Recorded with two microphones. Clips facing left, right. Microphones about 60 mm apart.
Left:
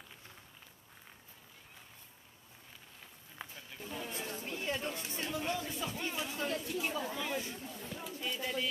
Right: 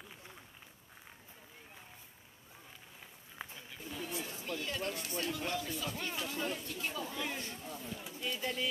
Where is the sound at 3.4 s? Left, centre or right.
Centre.